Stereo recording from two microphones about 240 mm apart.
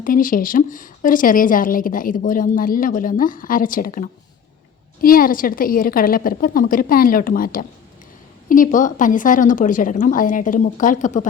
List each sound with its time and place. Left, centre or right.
0.0 s a woman's voice: left